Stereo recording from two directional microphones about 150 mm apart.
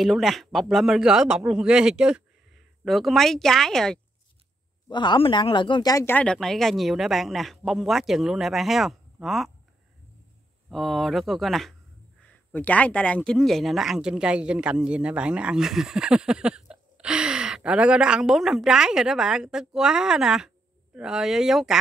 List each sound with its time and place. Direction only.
0.0 s speech: centre (ahead or behind)
4.8 s speech: 30° left (ahead or behind)
6.1 s speech: 5° left (ahead or behind)
10.7 s speech: centre (ahead or behind)